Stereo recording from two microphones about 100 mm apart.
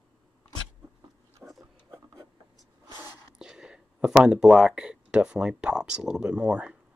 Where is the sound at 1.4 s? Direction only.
10° right (ahead or behind).